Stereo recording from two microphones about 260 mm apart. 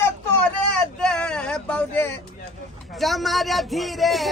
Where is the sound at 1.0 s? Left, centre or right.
Centre.